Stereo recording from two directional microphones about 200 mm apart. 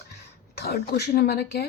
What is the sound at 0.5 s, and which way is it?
Speech, 55° left (ahead or behind).